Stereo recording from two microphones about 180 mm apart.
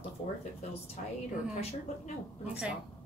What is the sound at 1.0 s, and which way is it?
Speech, 45° left (ahead or behind).